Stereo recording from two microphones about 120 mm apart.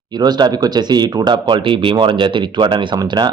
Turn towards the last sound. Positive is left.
turn(degrees=-40)  # may be behind; listen again after turning